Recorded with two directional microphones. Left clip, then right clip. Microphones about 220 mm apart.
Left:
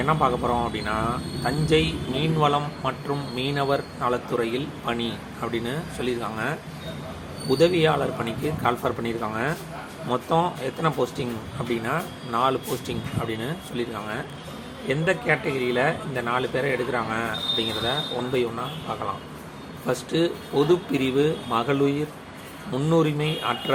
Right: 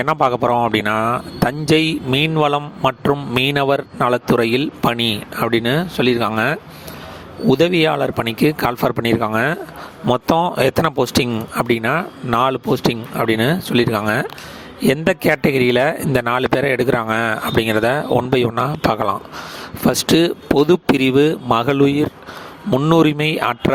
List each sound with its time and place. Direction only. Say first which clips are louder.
0.0 s speech: right 6 dB; 50° right (ahead or behind)